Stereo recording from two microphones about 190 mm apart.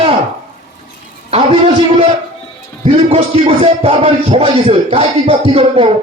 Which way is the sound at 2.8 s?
35° right (ahead or behind).